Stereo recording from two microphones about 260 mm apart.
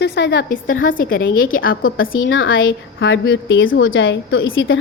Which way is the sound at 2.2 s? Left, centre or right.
Left.